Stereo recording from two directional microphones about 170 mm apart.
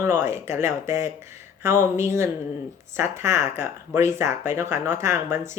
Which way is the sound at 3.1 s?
15° right (ahead or behind).